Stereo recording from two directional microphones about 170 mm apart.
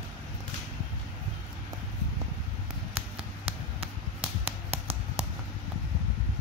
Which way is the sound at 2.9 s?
35° right (ahead or behind).